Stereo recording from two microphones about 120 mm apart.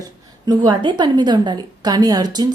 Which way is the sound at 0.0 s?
35° right (ahead or behind).